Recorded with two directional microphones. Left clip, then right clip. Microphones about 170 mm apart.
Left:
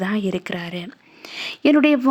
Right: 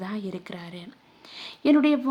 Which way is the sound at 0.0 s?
30° left (ahead or behind).